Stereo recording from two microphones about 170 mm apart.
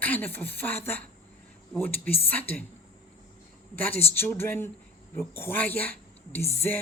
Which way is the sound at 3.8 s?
10° left (ahead or behind).